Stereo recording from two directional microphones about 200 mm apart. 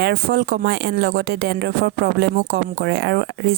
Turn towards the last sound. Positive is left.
turn(degrees=-60)  # may be behind; listen again after turning